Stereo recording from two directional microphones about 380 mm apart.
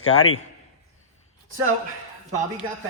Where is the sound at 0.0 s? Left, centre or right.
Left.